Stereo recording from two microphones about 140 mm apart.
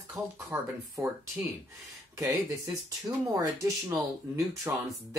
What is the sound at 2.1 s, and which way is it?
Speech, 20° right (ahead or behind).